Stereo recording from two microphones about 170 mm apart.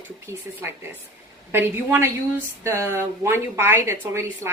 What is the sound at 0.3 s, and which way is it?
Speech, 15° right (ahead or behind).